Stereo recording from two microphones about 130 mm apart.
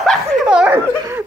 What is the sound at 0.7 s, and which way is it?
Laughter, 20° right (ahead or behind).